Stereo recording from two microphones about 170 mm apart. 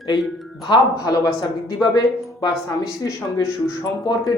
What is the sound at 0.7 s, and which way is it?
Speech, 20° left (ahead or behind).